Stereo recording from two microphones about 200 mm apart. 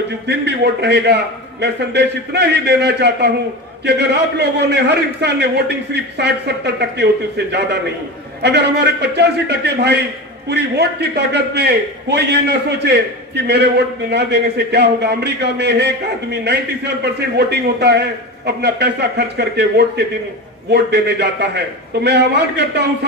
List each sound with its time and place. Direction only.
0.3 s a man's voice: 55° right (ahead or behind)